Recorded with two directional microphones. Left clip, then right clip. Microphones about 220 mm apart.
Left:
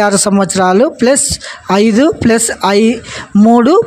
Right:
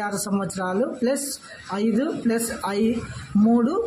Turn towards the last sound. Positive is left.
turn(degrees=40)  # may be behind; listen again after turning